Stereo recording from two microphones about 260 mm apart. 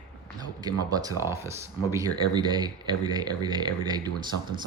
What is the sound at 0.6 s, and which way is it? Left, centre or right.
Speech, centre.